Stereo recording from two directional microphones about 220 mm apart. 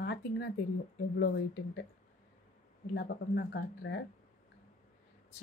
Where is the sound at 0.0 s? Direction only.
50° left (ahead or behind).